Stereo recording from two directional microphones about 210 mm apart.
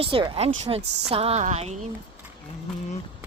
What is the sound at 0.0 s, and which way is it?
Speech, 25° right (ahead or behind).